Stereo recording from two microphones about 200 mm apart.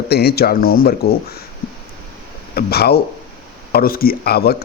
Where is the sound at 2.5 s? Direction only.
50° left (ahead or behind).